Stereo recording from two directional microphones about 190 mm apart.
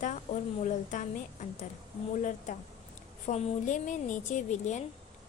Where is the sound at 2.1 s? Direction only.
40° left (ahead or behind).